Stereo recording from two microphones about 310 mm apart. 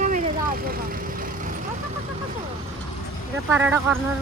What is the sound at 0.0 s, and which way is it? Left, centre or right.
Vehicle, right.